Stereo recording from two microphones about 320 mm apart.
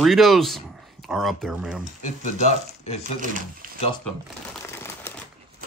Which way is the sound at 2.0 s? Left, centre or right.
Left.